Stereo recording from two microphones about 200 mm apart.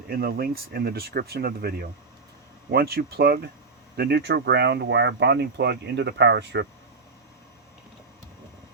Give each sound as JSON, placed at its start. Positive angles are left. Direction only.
{"t": 0.1, "sound": "speech", "side_deg": -50}